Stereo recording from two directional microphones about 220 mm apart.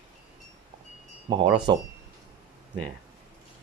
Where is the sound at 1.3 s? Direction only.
20° right (ahead or behind).